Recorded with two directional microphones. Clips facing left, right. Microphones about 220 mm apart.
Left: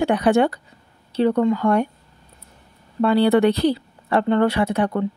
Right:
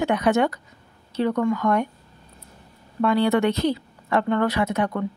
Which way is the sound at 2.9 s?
30° left (ahead or behind).